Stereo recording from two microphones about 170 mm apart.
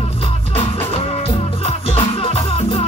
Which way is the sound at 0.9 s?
35° left (ahead or behind).